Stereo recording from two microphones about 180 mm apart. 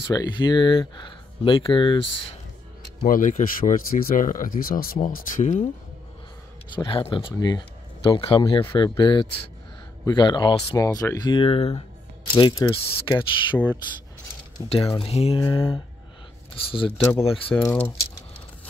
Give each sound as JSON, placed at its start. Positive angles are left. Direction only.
{"t": 0.1, "sound": "speech", "side_deg": 25}
{"t": 3.0, "sound": "speech", "side_deg": 50}
{"t": 6.7, "sound": "speech", "side_deg": 25}
{"t": 12.4, "sound": "speech", "side_deg": 20}
{"t": 14.7, "sound": "speech", "side_deg": 35}
{"t": 17.2, "sound": "speech", "side_deg": 30}
{"t": 17.6, "sound": "speech", "side_deg": 10}